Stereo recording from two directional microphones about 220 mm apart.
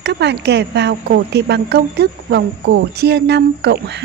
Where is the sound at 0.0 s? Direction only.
50° right (ahead or behind).